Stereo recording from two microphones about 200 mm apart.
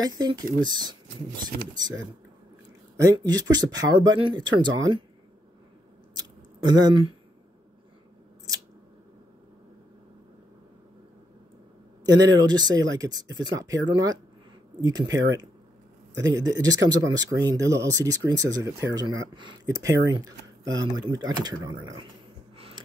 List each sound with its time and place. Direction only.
0.0 s speech: 20° right (ahead or behind)
3.0 s speech: 20° right (ahead or behind)
6.6 s speech: 20° right (ahead or behind)
12.0 s speech: 20° right (ahead or behind)